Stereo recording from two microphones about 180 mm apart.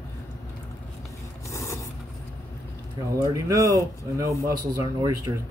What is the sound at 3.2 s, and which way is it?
Speech, 20° right (ahead or behind).